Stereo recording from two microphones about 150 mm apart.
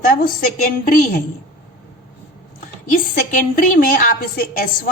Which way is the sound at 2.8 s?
65° left (ahead or behind).